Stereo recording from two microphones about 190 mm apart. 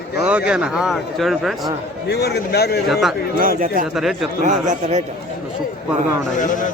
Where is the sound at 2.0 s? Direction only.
60° left (ahead or behind).